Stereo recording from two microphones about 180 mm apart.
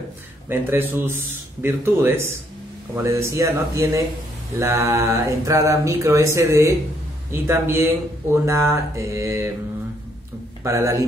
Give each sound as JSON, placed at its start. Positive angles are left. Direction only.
{"t": 0.5, "sound": "speech", "side_deg": -10}
{"t": 10.6, "sound": "speech", "side_deg": -15}